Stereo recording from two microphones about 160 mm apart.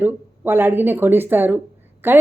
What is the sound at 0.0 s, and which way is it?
Speech, 15° right (ahead or behind).